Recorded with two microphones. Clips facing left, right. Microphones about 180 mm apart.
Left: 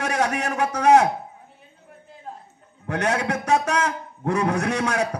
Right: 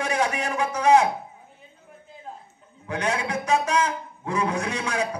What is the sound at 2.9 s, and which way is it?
A man's voice, 65° left (ahead or behind).